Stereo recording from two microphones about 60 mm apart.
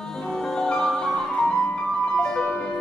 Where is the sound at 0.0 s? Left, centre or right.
Centre.